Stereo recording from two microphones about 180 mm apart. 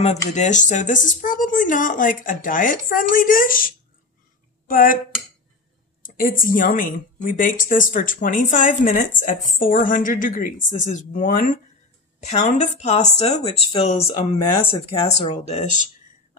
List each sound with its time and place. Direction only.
0.3 s a woman's voice: 40° left (ahead or behind)
6.0 s a woman's voice: 50° left (ahead or behind)